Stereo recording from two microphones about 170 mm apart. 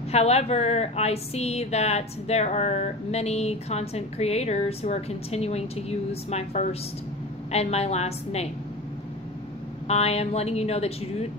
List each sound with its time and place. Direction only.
0.1 s a woman's voice: 40° left (ahead or behind)
9.8 s a woman's voice: 40° left (ahead or behind)